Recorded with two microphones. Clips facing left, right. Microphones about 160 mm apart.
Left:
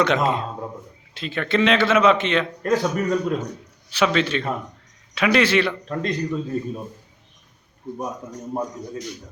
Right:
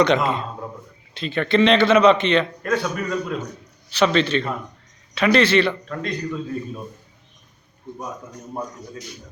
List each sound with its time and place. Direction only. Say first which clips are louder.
0.0 s a man's voice: right 2 dB; 5° left (ahead or behind)
2.6 s a man's voice: left 3 dB; 35° left (ahead or behind)
3.9 s a man's voice: right 2 dB; 10° left (ahead or behind)
5.9 s a man's voice: left 2 dB; 25° left (ahead or behind)